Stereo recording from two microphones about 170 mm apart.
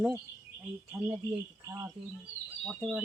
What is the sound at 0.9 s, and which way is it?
Speech, 15° right (ahead or behind).